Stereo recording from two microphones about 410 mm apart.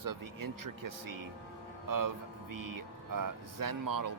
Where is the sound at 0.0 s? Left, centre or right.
Right.